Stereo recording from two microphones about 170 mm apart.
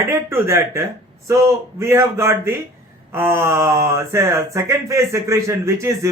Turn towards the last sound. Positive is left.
turn(degrees=-15)  # may be behind; listen again after turning